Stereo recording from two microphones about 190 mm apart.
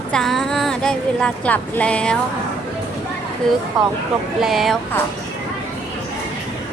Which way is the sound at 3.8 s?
Centre (ahead or behind).